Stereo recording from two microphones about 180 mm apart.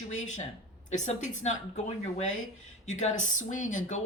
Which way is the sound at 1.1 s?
40° left (ahead or behind).